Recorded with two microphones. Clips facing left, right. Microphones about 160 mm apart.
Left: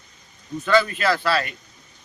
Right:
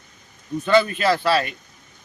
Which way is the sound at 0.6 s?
25° right (ahead or behind).